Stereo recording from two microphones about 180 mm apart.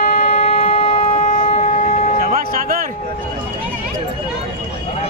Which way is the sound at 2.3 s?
50° right (ahead or behind).